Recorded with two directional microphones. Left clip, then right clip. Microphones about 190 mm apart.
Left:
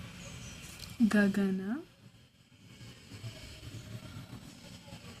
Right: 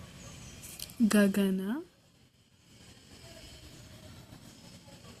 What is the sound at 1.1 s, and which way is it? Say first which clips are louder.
Speech: right 4 dB; 40° right (ahead or behind).